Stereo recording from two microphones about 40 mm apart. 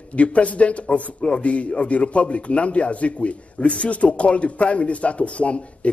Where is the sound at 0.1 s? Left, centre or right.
Left.